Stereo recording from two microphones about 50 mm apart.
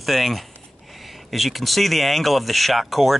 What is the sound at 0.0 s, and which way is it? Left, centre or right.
Speech, centre.